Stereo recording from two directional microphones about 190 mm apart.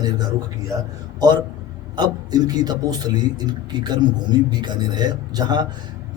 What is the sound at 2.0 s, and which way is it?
A man's voice, 20° right (ahead or behind).